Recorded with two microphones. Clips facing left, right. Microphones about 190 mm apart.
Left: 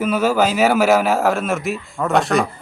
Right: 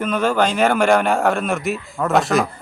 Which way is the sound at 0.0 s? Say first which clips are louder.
Left 1 dB; 5° left (ahead or behind).